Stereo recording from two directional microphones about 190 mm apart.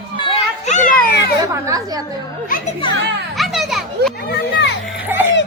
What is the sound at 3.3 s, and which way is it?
Children playing, centre (ahead or behind).